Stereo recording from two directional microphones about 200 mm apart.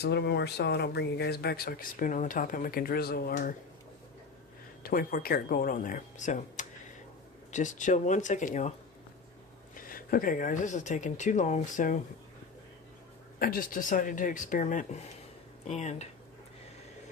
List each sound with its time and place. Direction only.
0.0 s speech: 55° left (ahead or behind)
4.8 s speech: 45° left (ahead or behind)
9.8 s speech: 45° left (ahead or behind)
13.4 s speech: 45° left (ahead or behind)